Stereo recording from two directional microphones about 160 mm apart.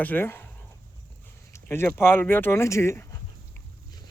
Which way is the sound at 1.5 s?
15° left (ahead or behind).